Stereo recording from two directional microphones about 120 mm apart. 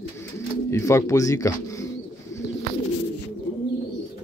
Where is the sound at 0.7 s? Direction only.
25° left (ahead or behind).